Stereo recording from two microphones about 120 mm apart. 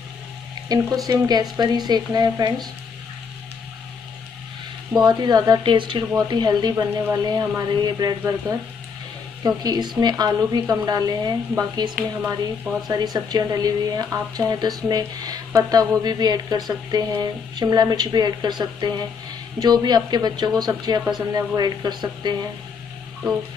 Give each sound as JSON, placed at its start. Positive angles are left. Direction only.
{"t": 0.7, "sound": "speech", "side_deg": -35}
{"t": 5.0, "sound": "speech", "side_deg": -35}